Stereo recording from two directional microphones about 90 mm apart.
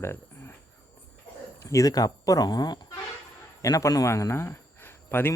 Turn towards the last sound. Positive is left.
turn(degrees=25)  # may be behind; listen again after turning